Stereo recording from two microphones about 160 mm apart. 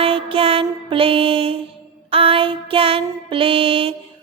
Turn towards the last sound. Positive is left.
turn(degrees=-35)  # may be behind; listen again after turning